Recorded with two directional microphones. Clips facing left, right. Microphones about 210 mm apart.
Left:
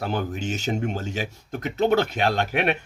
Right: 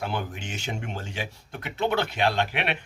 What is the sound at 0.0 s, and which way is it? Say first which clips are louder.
A man's voice: left 5 dB; 40° left (ahead or behind).